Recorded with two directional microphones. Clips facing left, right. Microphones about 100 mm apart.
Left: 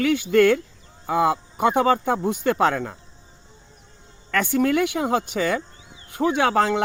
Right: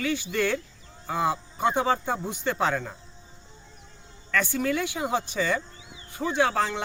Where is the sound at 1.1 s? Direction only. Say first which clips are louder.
Left 6 dB; 80° left.